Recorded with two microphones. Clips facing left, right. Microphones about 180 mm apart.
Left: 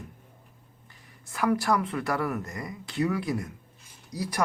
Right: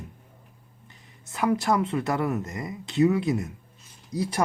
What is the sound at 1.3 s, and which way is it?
Speech, 20° right (ahead or behind).